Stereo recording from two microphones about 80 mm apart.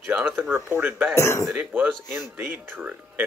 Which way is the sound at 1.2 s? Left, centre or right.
Left.